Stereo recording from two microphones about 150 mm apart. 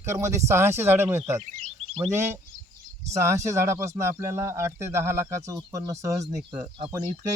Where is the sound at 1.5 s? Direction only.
40° right (ahead or behind).